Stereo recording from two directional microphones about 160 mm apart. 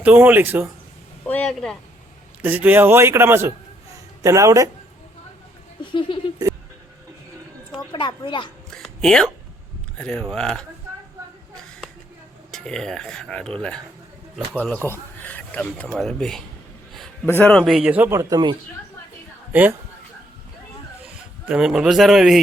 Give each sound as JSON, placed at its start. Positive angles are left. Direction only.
{"t": 0.0, "sound": "a man's voice", "side_deg": -10}
{"t": 1.3, "sound": "speech", "side_deg": 5}
{"t": 2.4, "sound": "a man's voice", "side_deg": -10}
{"t": 5.9, "sound": "speech", "side_deg": 30}
{"t": 7.9, "sound": "speech", "side_deg": 30}
{"t": 8.7, "sound": "a sound", "side_deg": 5}
{"t": 10.0, "sound": "speech", "side_deg": 5}
{"t": 12.5, "sound": "speech", "side_deg": 5}
{"t": 17.2, "sound": "speech", "side_deg": 15}
{"t": 17.5, "sound": "a man's voice", "side_deg": 0}
{"t": 21.4, "sound": "speech", "side_deg": -5}